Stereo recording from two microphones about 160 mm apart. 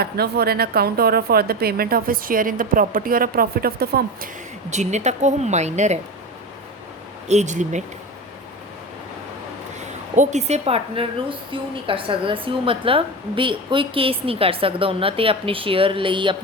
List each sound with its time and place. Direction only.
0.0 s speech: 80° right
4.7 s a woman's voice: 45° right (ahead or behind)
7.3 s a woman's voice: 45° right (ahead or behind)
10.2 s a woman's voice: 45° right (ahead or behind)